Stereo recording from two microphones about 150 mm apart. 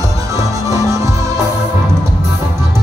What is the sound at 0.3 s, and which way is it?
Music, 20° right (ahead or behind).